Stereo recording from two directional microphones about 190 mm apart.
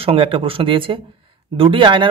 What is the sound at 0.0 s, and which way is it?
Speech, 30° right (ahead or behind).